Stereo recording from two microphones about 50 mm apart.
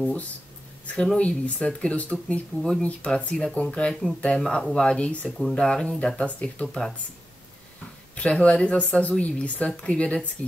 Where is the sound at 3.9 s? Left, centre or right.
Centre; by 5.3 s left.